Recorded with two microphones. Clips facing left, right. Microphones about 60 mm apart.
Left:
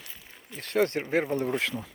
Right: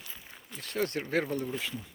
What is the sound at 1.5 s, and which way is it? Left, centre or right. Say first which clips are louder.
Speech: left 7 dB; left.